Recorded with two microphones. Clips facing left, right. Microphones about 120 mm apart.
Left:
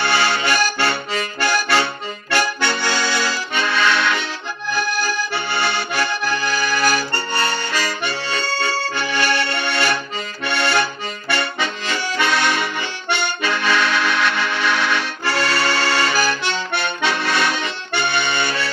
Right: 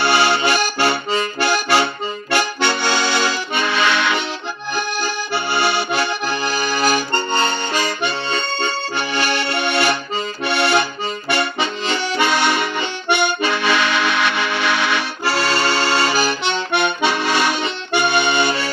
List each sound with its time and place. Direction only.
0.0 s accordion: 20° right (ahead or behind)